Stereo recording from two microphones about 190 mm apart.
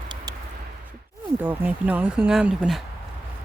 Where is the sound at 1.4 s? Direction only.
10° right (ahead or behind).